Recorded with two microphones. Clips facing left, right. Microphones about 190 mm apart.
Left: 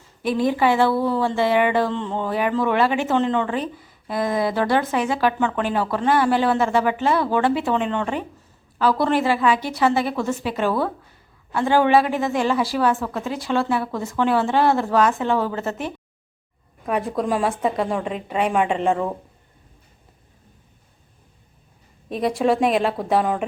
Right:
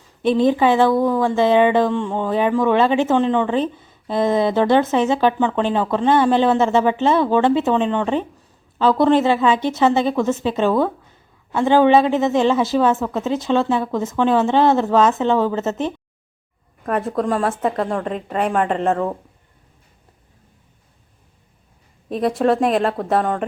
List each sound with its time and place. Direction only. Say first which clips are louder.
0.2 s speech: right 4 dB; 25° right (ahead or behind)
16.8 s a woman's voice: right 2 dB; centre (ahead or behind)
22.1 s a woman's voice: right 2 dB; centre (ahead or behind)